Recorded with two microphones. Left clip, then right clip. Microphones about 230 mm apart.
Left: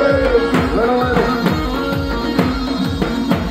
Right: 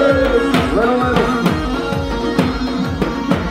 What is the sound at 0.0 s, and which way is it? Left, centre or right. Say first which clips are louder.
Music: even; right.